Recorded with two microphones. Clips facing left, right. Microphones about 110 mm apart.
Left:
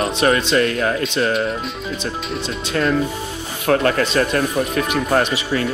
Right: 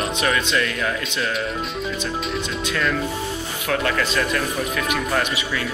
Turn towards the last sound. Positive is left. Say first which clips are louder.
# left 5 dB
turn(degrees=35)  # may be behind; listen again after turning